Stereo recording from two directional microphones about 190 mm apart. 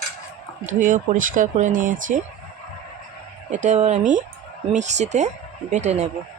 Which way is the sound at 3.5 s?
40° right (ahead or behind).